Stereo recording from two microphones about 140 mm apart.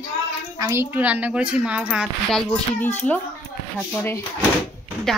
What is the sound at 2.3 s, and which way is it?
A child's voice, 10° left (ahead or behind).